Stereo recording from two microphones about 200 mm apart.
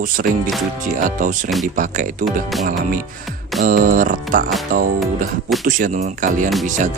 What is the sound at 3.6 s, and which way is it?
Speech, 45° right (ahead or behind).